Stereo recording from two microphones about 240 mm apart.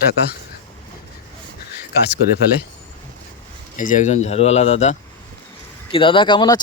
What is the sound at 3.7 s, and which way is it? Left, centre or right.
Speech, left.